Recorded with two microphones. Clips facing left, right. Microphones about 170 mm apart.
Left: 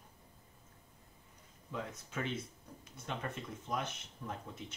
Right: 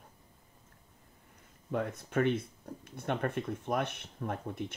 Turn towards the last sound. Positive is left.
turn(degrees=-60)  # may be behind; listen again after turning